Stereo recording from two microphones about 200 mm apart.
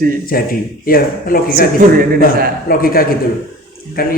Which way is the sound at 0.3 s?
50° left (ahead or behind).